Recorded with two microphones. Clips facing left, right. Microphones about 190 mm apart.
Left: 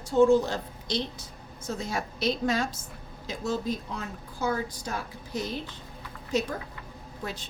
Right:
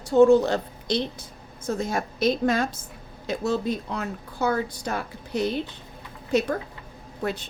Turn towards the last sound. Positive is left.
turn(degrees=-60)  # may be behind; listen again after turning